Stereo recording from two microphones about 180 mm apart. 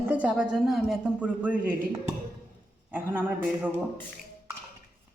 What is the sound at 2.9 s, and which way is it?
Speech, 10° right (ahead or behind).